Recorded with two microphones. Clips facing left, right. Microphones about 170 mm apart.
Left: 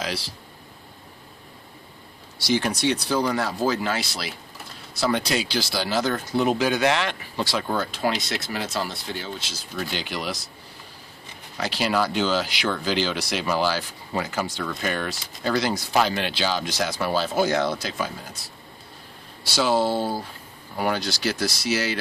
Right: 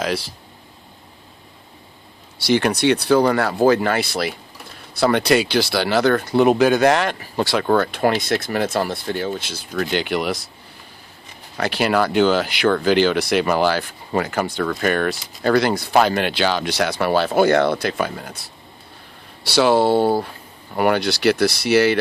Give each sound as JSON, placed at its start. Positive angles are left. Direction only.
{"t": 0.0, "sound": "speech", "side_deg": -50}
{"t": 2.4, "sound": "speech", "side_deg": -65}
{"t": 11.5, "sound": "speech", "side_deg": -60}